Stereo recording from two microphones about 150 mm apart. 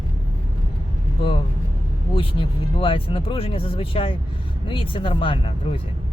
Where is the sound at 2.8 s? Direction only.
35° left (ahead or behind).